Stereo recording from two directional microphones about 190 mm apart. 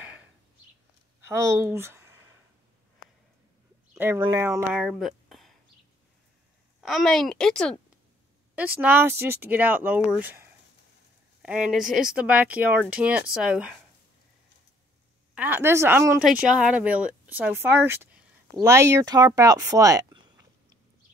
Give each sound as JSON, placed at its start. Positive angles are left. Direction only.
{"t": 1.2, "sound": "speech", "side_deg": -15}
{"t": 3.9, "sound": "a sound", "side_deg": -15}
{"t": 4.4, "sound": "speech", "side_deg": -10}
{"t": 4.7, "sound": "a sound", "side_deg": 0}
{"t": 6.8, "sound": "a woman's voice", "side_deg": 0}
{"t": 8.5, "sound": "speech", "side_deg": -10}
{"t": 15.3, "sound": "speech", "side_deg": -10}